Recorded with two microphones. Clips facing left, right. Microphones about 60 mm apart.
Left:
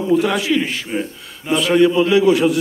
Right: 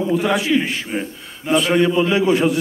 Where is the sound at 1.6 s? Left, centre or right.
Right.